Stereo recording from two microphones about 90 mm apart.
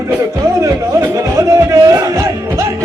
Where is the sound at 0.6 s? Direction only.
35° right (ahead or behind).